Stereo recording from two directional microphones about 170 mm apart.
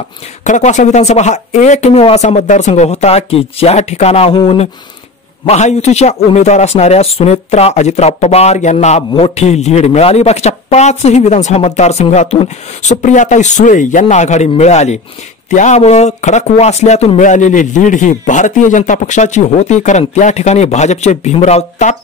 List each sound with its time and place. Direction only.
0.4 s speech: 45° left (ahead or behind)